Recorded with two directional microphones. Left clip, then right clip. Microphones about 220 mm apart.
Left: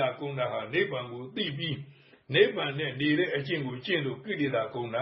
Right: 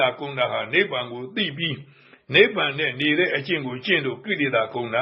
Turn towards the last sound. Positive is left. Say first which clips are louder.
# right 8 dB
turn(degrees=-15)  # may be behind; listen again after turning